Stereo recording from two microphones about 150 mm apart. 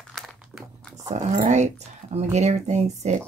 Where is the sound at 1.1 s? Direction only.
50° right (ahead or behind).